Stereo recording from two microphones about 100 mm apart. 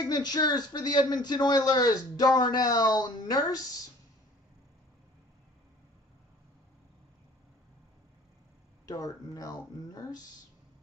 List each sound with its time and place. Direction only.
0.0 s speech: 45° left (ahead or behind)
8.8 s speech: 40° left (ahead or behind)